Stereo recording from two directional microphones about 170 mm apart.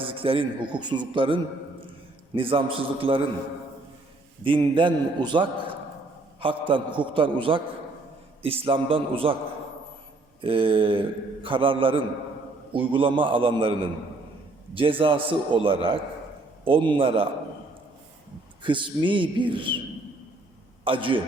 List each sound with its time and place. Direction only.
0.0 s a man's voice: 30° right (ahead or behind)
4.4 s a man's voice: 30° right (ahead or behind)
10.4 s a man's voice: 30° right (ahead or behind)
14.8 s a man's voice: 30° right (ahead or behind)
18.6 s a man's voice: 30° right (ahead or behind)
20.8 s a man's voice: 30° right (ahead or behind)